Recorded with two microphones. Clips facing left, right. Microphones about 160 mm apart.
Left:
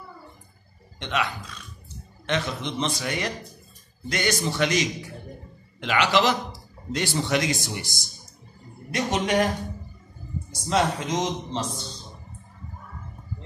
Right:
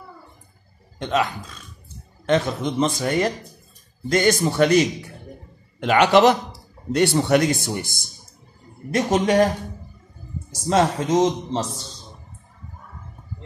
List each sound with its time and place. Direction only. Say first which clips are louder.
1.0 s a man's voice: right 6 dB; 40° right (ahead or behind)
8.9 s speech: right 5 dB; 40° right (ahead or behind)
10.7 s speech: right 5 dB; 40° right (ahead or behind)